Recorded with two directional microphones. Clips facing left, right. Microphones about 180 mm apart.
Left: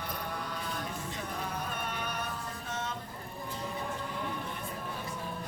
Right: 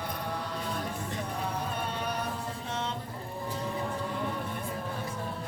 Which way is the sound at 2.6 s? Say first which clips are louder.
Right 3 dB; 30° right (ahead or behind).